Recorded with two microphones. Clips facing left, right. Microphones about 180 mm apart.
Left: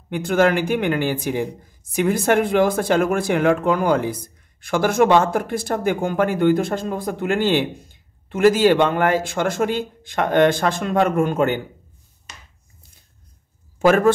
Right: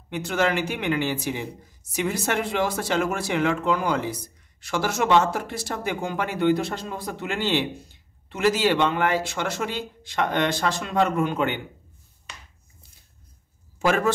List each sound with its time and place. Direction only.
0.1 s a man's voice: 50° left (ahead or behind)
13.7 s a man's voice: 50° left (ahead or behind)